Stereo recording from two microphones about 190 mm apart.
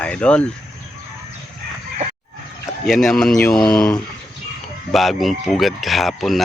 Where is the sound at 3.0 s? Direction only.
Centre (ahead or behind).